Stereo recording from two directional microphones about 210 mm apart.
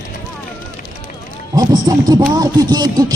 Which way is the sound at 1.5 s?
15° right (ahead or behind).